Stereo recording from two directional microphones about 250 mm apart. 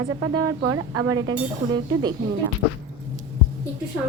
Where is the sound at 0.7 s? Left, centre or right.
Right.